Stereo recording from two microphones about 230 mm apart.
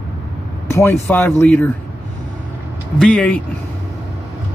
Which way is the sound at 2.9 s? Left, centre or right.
Centre.